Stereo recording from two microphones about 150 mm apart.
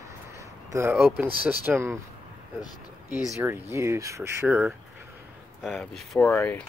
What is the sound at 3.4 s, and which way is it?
Speech, 15° right (ahead or behind).